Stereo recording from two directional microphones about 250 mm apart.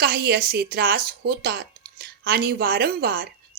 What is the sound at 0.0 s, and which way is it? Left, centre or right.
Speech, right.